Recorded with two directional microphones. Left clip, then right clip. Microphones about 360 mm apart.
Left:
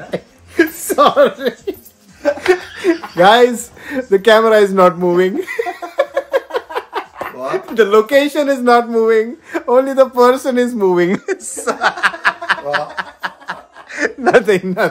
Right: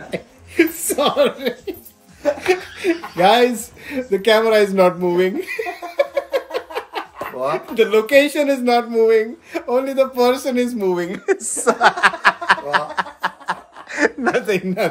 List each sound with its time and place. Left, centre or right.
0.1 s chuckle: centre
2.2 s whimper: left
3.2 s speech: centre
5.9 s a sound: centre
7.5 s speech: centre
10.8 s speech: left
11.2 s snicker: centre
14.3 s speech: centre